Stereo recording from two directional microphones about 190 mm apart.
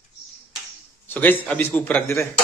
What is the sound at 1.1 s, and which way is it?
A man's voice, 10° left (ahead or behind).